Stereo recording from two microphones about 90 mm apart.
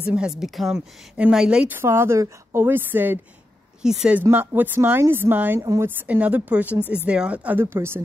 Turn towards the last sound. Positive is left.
turn(degrees=-25)  # may be behind; listen again after turning